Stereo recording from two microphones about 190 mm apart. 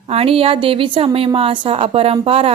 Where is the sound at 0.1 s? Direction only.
30° right (ahead or behind).